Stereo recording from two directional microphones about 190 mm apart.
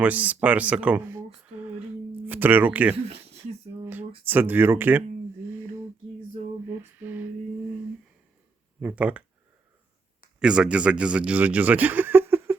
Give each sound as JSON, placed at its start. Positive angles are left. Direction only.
{"t": 0.0, "sound": "speech", "side_deg": -10}
{"t": 4.3, "sound": "speech", "side_deg": -10}
{"t": 6.7, "sound": "a sound", "side_deg": -10}
{"t": 8.8, "sound": "speech", "side_deg": -10}
{"t": 10.4, "sound": "speech", "side_deg": -5}